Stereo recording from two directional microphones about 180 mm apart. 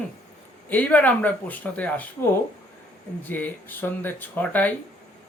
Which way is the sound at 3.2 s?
10° left (ahead or behind).